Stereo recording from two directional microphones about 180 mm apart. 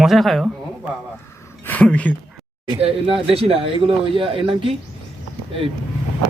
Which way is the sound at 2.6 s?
30° right (ahead or behind).